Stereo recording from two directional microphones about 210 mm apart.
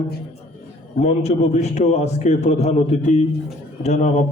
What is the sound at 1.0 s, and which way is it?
A man's voice, 30° left (ahead or behind).